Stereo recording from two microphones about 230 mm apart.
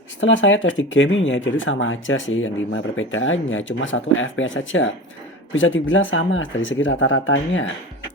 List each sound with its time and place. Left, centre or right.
0.2 s speech: left